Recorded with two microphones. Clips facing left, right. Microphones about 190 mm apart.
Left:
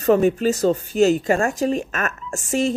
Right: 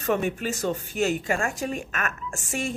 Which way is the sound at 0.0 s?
35° left (ahead or behind).